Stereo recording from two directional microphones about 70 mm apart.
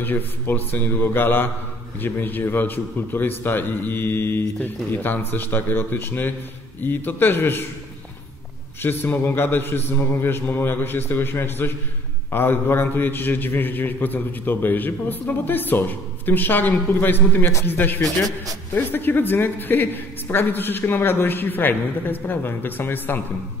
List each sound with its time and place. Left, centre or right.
0.0 s a man's voice: left
8.8 s a man's voice: left